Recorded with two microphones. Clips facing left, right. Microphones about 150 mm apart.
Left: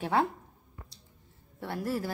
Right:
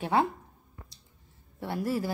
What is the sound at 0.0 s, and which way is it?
Speech, 5° right (ahead or behind).